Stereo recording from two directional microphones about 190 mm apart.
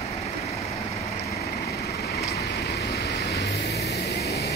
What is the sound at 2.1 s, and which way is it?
Vehicle, 55° left (ahead or behind).